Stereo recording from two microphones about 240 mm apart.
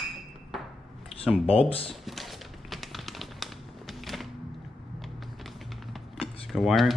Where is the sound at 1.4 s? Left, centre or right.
Left.